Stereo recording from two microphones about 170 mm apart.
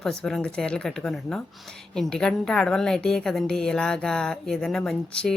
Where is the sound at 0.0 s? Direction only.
5° left (ahead or behind).